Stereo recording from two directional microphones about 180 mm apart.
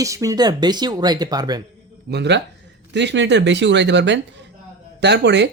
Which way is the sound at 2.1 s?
70° right (ahead or behind).